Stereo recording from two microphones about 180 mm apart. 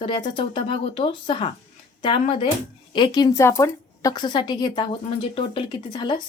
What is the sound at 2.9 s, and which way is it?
Speech, 25° left (ahead or behind).